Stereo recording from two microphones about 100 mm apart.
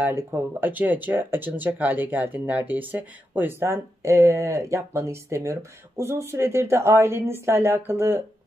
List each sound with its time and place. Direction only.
0.0 s speech: 20° right (ahead or behind)